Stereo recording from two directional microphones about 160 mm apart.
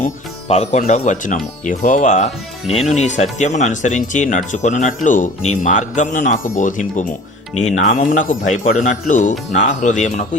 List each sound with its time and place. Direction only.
0.4 s speech: 40° left (ahead or behind)